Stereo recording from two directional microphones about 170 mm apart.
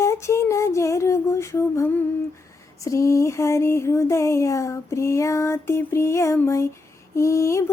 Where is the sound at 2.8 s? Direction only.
20° left (ahead or behind).